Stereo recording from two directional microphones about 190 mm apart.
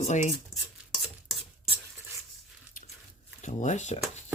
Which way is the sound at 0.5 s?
Centre (ahead or behind).